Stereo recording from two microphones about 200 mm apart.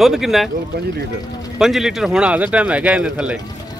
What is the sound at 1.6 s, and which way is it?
Speech, centre (ahead or behind).